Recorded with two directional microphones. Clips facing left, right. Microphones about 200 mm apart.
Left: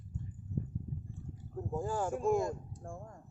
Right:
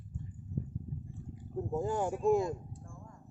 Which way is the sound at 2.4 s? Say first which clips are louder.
Right 1 dB; 45° left (ahead or behind).